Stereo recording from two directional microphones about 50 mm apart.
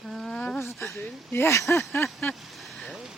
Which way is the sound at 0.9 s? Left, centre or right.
Left.